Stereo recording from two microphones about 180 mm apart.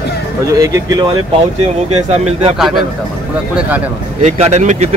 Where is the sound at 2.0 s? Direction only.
35° right (ahead or behind).